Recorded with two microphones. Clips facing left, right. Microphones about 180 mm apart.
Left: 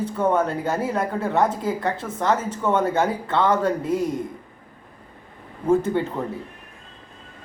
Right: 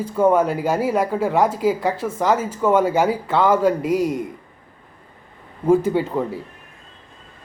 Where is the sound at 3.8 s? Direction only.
90° right.